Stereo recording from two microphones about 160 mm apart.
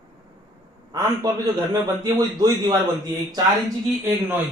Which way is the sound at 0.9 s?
25° right (ahead or behind).